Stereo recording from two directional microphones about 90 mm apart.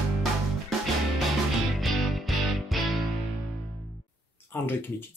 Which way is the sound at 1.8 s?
Centre (ahead or behind).